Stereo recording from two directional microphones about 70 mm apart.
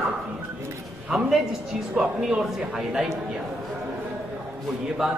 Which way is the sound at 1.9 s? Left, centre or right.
Centre.